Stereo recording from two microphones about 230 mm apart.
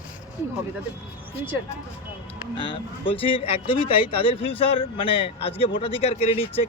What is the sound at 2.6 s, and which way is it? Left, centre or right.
Speech, left.